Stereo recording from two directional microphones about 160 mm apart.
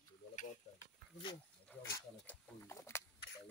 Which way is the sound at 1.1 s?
30° left (ahead or behind).